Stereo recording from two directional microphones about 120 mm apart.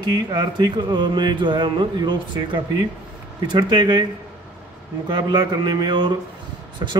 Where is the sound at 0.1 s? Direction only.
40° right (ahead or behind).